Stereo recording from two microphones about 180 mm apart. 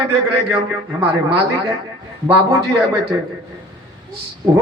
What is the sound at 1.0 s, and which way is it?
Speech, 20° right (ahead or behind).